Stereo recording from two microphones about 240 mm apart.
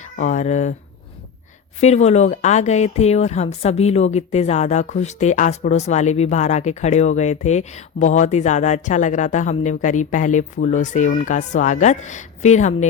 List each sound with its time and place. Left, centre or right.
0.0 s speech: left
1.8 s speech: left